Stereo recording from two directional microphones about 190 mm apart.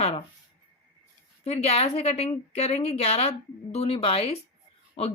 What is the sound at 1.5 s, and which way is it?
A woman's voice, 35° left (ahead or behind).